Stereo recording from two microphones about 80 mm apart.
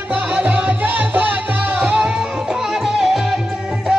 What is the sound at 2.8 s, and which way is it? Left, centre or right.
Music, centre.